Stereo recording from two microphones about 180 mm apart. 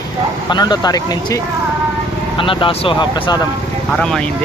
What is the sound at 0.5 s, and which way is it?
Speech, 25° left (ahead or behind).